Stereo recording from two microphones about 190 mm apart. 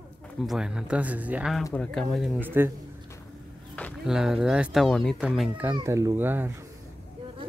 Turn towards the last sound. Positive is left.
turn(degrees=-10)  # may be behind; listen again after turning